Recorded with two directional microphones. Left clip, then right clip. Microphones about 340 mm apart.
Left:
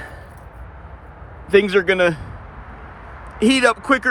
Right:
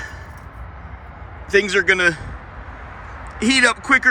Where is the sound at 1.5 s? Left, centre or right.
Centre.